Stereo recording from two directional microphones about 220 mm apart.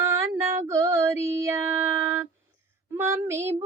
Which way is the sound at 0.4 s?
30° right (ahead or behind).